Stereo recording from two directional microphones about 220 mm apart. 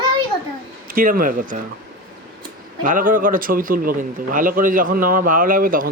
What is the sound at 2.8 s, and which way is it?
Speech, 35° right (ahead or behind).